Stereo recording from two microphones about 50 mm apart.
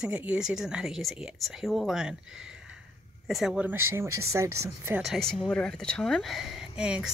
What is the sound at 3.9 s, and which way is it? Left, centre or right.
Speech, right.